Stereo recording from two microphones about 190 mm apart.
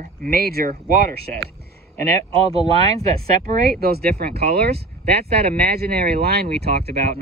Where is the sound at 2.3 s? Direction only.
30° right (ahead or behind).